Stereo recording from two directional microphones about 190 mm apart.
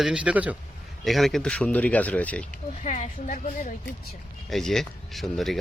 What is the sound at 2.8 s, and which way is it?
Speech, 40° left (ahead or behind).